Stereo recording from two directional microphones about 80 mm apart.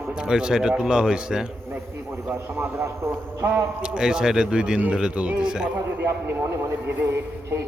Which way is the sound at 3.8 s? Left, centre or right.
Centre.